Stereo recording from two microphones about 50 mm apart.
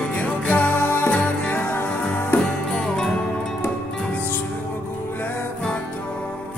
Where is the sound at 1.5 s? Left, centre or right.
Left.